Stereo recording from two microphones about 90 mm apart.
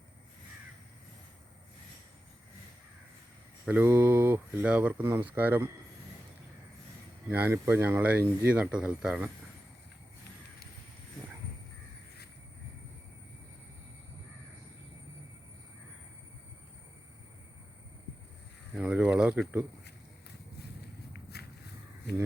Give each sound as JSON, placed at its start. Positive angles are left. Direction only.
{"t": 3.7, "sound": "speech", "side_deg": -20}
{"t": 7.3, "sound": "speech", "side_deg": -20}
{"t": 18.7, "sound": "a sound", "side_deg": -10}